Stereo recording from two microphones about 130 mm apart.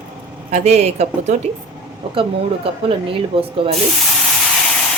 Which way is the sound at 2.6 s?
45° right (ahead or behind).